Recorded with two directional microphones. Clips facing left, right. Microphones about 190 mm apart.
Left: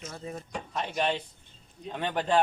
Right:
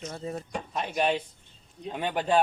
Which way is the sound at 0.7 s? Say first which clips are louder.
Right 2 dB; 10° right (ahead or behind).